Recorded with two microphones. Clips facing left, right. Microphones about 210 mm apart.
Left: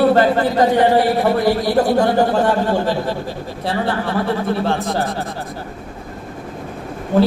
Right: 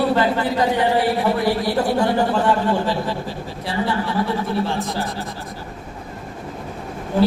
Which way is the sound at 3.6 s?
60° left (ahead or behind).